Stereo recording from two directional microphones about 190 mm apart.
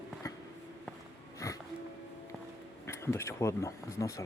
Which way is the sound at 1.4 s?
15° left (ahead or behind).